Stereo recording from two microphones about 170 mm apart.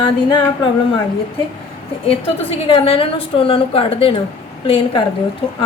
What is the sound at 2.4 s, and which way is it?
A woman's voice, 35° left (ahead or behind).